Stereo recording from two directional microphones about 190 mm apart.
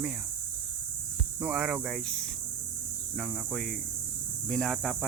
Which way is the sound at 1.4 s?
5° right (ahead or behind).